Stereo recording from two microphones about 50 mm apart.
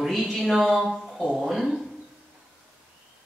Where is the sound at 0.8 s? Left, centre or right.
Centre.